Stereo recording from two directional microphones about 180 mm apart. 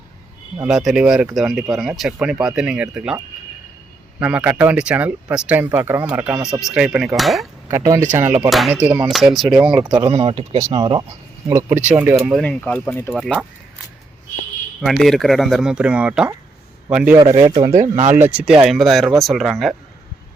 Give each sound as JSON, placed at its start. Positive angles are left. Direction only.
{"t": 0.6, "sound": "speech", "side_deg": 0}
{"t": 4.2, "sound": "speech", "side_deg": -10}
{"t": 7.7, "sound": "speech", "side_deg": -15}
{"t": 8.4, "sound": "speech", "side_deg": 0}
{"t": 9.8, "sound": "speech", "side_deg": -25}
{"t": 11.4, "sound": "speech", "side_deg": -15}
{"t": 13.1, "sound": "speech", "side_deg": 0}
{"t": 14.8, "sound": "speech", "side_deg": 0}
{"t": 17.3, "sound": "speech", "side_deg": -20}
{"t": 17.7, "sound": "speech", "side_deg": -45}
{"t": 18.2, "sound": "speech", "side_deg": -5}